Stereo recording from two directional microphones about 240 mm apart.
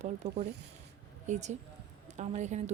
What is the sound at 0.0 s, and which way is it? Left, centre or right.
A woman's voice, right.